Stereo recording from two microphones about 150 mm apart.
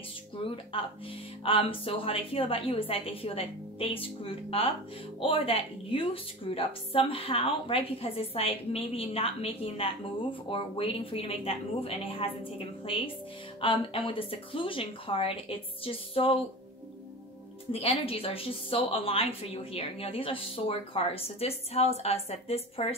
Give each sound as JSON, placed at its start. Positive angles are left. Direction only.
{"t": 1.4, "sound": "a woman's voice", "side_deg": 35}
{"t": 17.7, "sound": "a woman's voice", "side_deg": 40}